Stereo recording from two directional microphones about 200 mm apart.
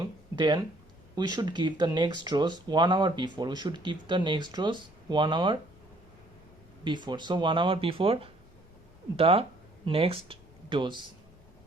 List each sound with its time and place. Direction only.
0.3 s speech: 25° right (ahead or behind)
6.8 s speech: 20° right (ahead or behind)